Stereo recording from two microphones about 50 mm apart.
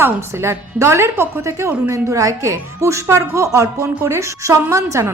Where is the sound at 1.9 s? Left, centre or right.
Right.